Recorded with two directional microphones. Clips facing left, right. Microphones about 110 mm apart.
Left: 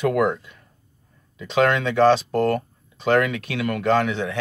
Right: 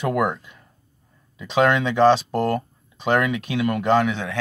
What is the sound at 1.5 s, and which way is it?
Speech, 20° right (ahead or behind).